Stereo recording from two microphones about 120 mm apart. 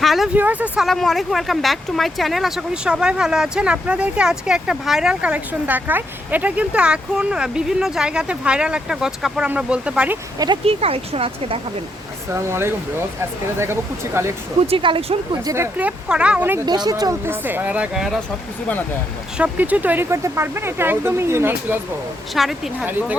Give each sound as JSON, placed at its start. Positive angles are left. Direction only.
{"t": 0.0, "sound": "a sound", "side_deg": 0}
{"t": 0.3, "sound": "speech", "side_deg": -15}
{"t": 0.9, "sound": "speech", "side_deg": 0}
{"t": 10.3, "sound": "speech", "side_deg": -35}
{"t": 10.7, "sound": "speech", "side_deg": -55}
{"t": 12.3, "sound": "speech", "side_deg": -20}
{"t": 14.7, "sound": "speech", "side_deg": -45}
{"t": 15.4, "sound": "speech", "side_deg": -20}
{"t": 16.6, "sound": "speech", "side_deg": -35}
{"t": 17.4, "sound": "speech", "side_deg": -15}
{"t": 17.9, "sound": "a woman's voice", "side_deg": -5}
{"t": 19.4, "sound": "speech", "side_deg": -10}
{"t": 22.4, "sound": "a woman's voice", "side_deg": 0}
{"t": 22.9, "sound": "speech", "side_deg": -15}